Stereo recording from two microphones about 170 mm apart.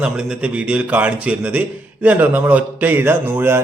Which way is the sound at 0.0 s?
5° right (ahead or behind).